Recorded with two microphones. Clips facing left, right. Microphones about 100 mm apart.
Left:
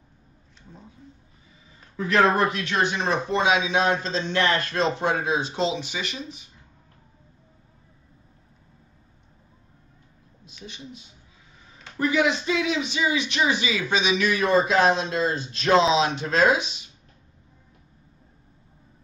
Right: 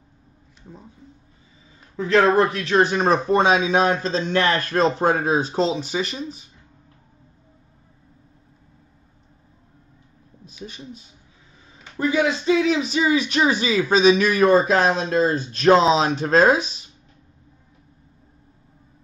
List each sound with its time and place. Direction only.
2.0 s a man's voice: 30° right (ahead or behind)
10.6 s speech: 50° right (ahead or behind)
12.0 s a man's voice: 25° right (ahead or behind)